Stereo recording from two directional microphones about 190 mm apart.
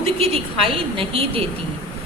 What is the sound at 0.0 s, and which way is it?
A woman's voice, 30° right (ahead or behind).